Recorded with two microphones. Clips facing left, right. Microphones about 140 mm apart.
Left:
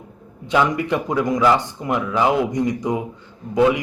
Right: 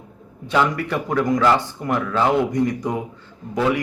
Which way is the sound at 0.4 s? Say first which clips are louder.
Left 1 dB; 15° left (ahead or behind).